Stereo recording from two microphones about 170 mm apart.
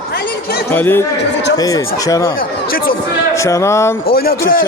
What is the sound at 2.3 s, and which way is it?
Speech, 60° left (ahead or behind).